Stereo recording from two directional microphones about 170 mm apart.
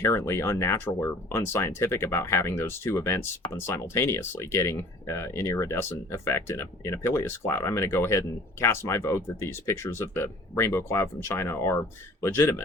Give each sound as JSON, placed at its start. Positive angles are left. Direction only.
{"t": 0.0, "sound": "speech", "side_deg": 15}